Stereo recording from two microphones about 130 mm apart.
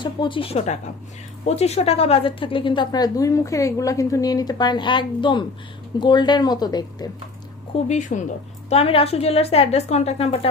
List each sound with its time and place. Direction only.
0.0 s a woman's voice: 40° left (ahead or behind)
7.9 s speech: 70° left (ahead or behind)
8.7 s a woman's voice: 50° left (ahead or behind)